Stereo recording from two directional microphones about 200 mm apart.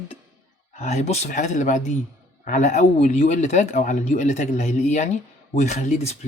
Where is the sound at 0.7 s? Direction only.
35° left (ahead or behind).